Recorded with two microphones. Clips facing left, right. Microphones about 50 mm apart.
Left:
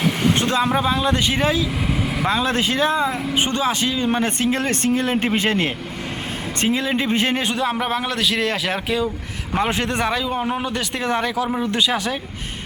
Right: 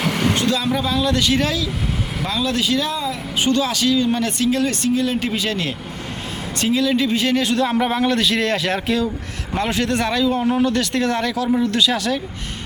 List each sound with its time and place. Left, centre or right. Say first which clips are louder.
0.3 s speech: left 1 dB; left
7.5 s a man's voice: right 3 dB; centre
9.6 s a man's voice: right 1 dB; left